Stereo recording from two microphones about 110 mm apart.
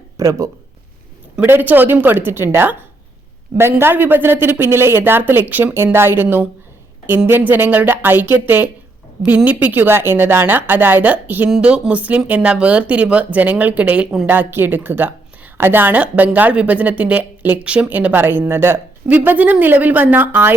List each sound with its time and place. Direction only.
0.2 s speech: 30° right (ahead or behind)
1.4 s speech: 15° right (ahead or behind)